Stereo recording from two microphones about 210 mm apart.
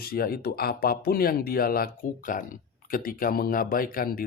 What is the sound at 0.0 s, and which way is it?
Speech, 45° left (ahead or behind).